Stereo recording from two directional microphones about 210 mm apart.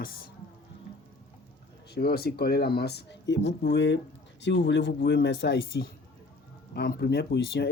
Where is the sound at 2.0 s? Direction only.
50° left (ahead or behind).